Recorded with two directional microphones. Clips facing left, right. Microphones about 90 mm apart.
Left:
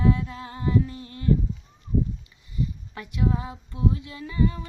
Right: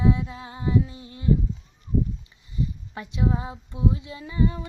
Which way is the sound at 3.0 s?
25° right (ahead or behind).